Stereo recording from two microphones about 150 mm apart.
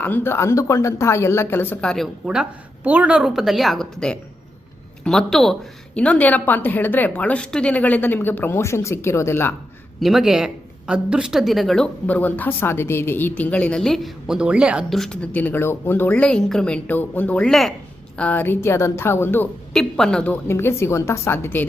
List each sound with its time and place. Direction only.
0.0 s speech: 15° left (ahead or behind)
2.2 s a woman's voice: 5° right (ahead or behind); by 9.6 s 15° left (ahead or behind)
10.0 s speech: centre (ahead or behind); by 19.5 s 15° left (ahead or behind)
19.7 s speech: 5° left (ahead or behind)